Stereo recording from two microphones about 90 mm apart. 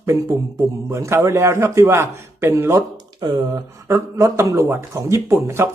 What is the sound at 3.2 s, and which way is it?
Speech, 50° right (ahead or behind).